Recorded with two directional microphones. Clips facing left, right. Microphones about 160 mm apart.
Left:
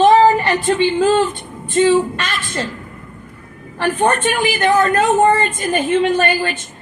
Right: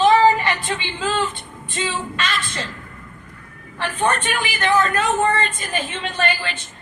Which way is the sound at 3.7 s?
50° left (ahead or behind).